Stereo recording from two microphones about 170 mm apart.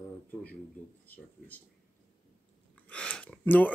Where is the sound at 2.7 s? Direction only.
5° left (ahead or behind).